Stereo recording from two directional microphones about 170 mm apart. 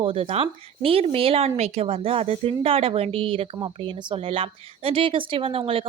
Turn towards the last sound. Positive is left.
turn(degrees=-30)  # may be behind; listen again after turning